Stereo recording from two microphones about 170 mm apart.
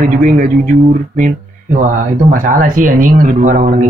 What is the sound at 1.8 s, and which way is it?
Speech, 50° right (ahead or behind).